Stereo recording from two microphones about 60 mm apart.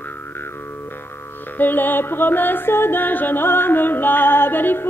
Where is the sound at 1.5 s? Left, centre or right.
Left.